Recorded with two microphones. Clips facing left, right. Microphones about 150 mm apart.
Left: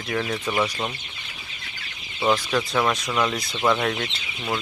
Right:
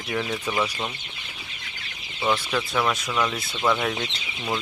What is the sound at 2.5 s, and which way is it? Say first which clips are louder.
Speech: left 2 dB; 5° left (ahead or behind).